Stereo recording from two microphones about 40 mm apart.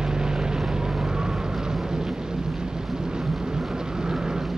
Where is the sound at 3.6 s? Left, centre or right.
Centre.